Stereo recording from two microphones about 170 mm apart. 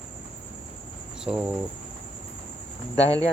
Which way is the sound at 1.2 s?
5° right (ahead or behind).